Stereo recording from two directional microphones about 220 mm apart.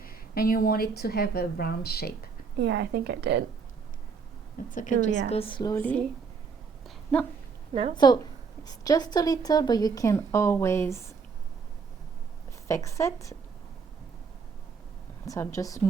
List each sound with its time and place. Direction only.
0.0 s a woman's voice: 40° left (ahead or behind)
2.6 s a woman's voice: 50° right (ahead or behind)
4.7 s a woman's voice: 35° left (ahead or behind)
5.3 s a woman's voice: 25° left (ahead or behind); by 6.1 s 5° left (ahead or behind)
6.8 s a sound: 5° left (ahead or behind)
7.9 s a woman's voice: 15° left (ahead or behind)
12.6 s a woman's voice: 15° left (ahead or behind)
15.3 s a woman's voice: 15° left (ahead or behind)